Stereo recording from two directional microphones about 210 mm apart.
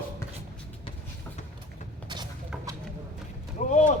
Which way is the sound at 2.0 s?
20° right (ahead or behind).